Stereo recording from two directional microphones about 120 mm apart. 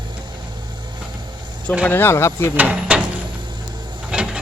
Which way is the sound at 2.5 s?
10° right (ahead or behind).